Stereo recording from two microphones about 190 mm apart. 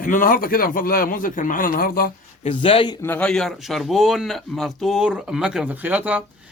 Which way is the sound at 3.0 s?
10° left (ahead or behind).